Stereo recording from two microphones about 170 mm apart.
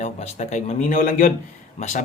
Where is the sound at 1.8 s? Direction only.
45° left (ahead or behind).